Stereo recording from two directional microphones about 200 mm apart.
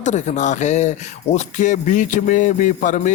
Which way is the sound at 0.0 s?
35° left (ahead or behind).